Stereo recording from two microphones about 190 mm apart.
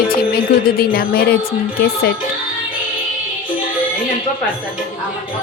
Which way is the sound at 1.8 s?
55° left (ahead or behind).